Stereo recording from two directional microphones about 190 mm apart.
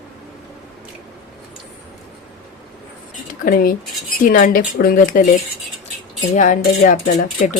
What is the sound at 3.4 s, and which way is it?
Speech, 50° left (ahead or behind).